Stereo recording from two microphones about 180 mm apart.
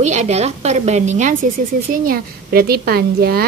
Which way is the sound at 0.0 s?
40° right (ahead or behind).